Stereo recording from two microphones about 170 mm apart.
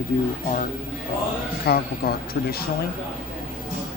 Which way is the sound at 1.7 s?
65° left (ahead or behind).